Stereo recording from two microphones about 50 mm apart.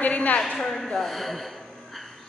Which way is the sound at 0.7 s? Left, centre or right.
Centre.